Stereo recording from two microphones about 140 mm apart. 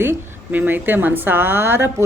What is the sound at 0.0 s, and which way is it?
A woman's voice, 15° right (ahead or behind).